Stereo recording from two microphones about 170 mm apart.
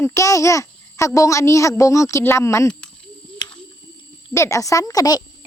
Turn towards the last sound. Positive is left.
turn(degrees=20)  # may be behind; listen again after turning